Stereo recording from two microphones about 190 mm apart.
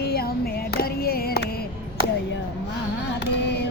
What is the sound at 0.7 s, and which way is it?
Music, 55° left (ahead or behind).